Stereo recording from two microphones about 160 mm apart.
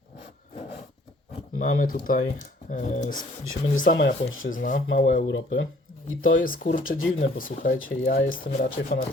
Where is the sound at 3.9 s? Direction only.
90° left.